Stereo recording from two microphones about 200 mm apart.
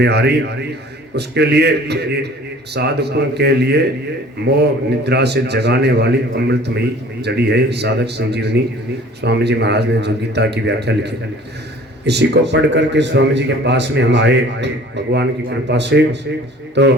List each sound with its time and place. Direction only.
0.0 s a man's voice: 55° right (ahead or behind)